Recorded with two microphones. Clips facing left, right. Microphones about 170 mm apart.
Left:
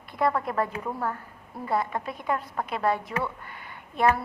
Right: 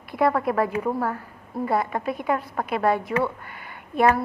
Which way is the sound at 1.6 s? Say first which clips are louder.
Right 4 dB; 60° right (ahead or behind).